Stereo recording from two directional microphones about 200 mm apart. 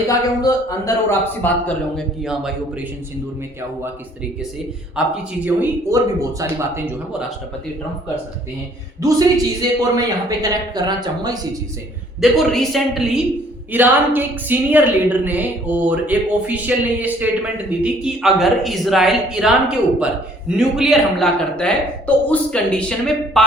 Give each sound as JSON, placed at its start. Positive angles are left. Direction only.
{"t": 0.1, "sound": "speech", "side_deg": 15}
{"t": 2.2, "sound": "a man's voice", "side_deg": -5}
{"t": 5.0, "sound": "a man's voice", "side_deg": -5}
{"t": 9.0, "sound": "a woman's voice", "side_deg": -15}
{"t": 12.2, "sound": "a man's voice", "side_deg": 0}